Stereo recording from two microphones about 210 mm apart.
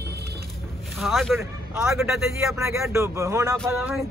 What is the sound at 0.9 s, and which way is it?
Speech, centre (ahead or behind).